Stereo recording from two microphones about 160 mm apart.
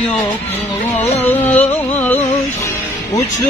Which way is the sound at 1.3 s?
10° left (ahead or behind).